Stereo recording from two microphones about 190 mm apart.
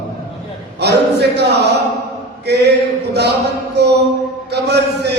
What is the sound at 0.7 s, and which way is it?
Speech, 60° right (ahead or behind).